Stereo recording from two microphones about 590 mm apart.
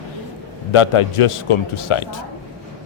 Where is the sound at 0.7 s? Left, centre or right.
Left.